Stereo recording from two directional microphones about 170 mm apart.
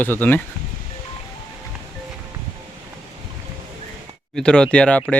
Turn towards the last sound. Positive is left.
turn(degrees=5)  # may be behind; listen again after turning